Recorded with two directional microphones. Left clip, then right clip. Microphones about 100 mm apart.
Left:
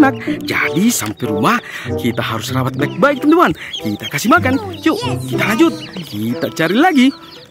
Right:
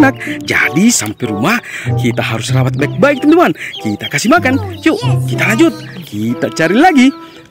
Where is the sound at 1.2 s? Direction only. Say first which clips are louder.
Right 1 dB; 15° right (ahead or behind).